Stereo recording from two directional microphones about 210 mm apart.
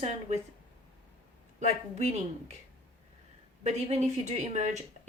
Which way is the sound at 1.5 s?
35° right (ahead or behind).